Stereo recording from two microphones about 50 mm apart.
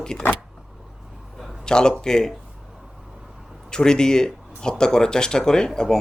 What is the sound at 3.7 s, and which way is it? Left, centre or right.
Speech, centre.